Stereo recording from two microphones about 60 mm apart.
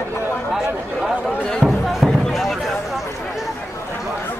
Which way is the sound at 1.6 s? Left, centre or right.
Centre.